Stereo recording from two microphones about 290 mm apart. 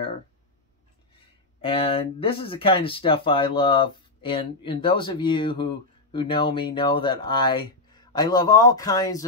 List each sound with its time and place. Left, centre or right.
1.6 s speech: centre